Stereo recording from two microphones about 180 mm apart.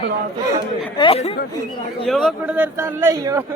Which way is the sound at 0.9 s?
30° left (ahead or behind).